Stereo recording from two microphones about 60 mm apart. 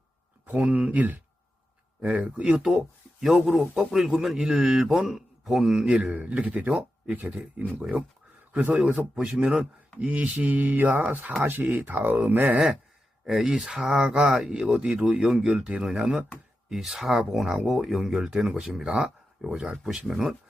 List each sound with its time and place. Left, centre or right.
0.5 s mantra: right
2.0 s a man's voice: right
6.4 s mantra: right
7.8 s a man's voice: centre
8.5 s mantra: right
11.4 s speech: right
13.2 s a man's voice: centre